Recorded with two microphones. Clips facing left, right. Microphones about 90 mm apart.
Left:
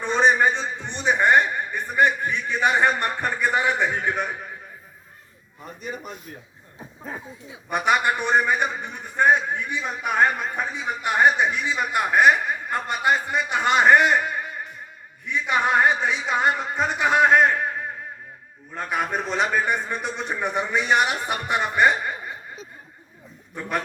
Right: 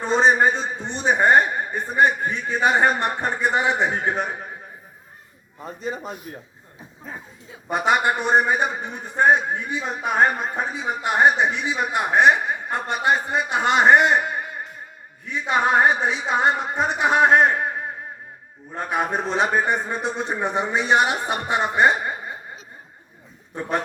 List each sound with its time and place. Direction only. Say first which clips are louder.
0.0 s a man's voice: right 2 dB; 35° right (ahead or behind)
3.0 s a man's voice: right 1 dB; 25° right (ahead or behind)
5.5 s a man's voice: right 4 dB; 30° right (ahead or behind)
7.7 s a man's voice: right 1 dB; 35° right (ahead or behind)
15.3 s a man's voice: right 2 dB; 35° right (ahead or behind)
23.6 s a man's voice: right 2 dB; 25° right (ahead or behind)